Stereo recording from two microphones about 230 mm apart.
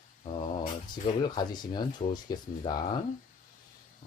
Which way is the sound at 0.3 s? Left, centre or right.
Left.